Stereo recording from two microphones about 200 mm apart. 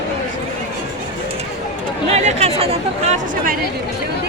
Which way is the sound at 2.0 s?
30° right (ahead or behind).